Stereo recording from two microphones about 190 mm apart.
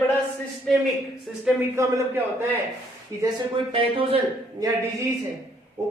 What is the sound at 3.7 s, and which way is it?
Speech, 30° right (ahead or behind).